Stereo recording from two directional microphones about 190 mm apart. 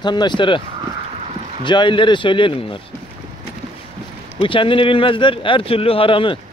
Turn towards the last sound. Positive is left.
turn(degrees=25)  # may be behind; listen again after turning